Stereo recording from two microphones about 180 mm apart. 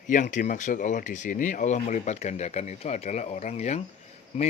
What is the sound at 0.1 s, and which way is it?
Speech, 45° left (ahead or behind).